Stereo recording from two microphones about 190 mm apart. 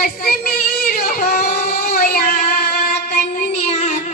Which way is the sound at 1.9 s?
50° left (ahead or behind).